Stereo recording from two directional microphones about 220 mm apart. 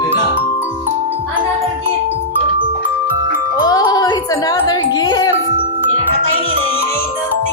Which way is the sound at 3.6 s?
15° left (ahead or behind).